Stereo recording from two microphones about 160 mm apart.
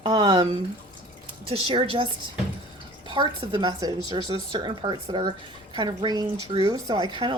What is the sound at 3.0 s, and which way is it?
A woman's voice, 30° right (ahead or behind).